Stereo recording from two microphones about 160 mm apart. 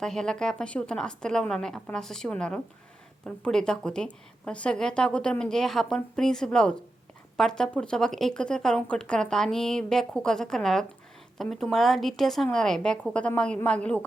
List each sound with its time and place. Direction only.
0.0 s a woman's voice: 5° left (ahead or behind)